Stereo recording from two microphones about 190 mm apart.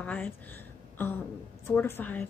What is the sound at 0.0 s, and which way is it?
Speech, 10° left (ahead or behind).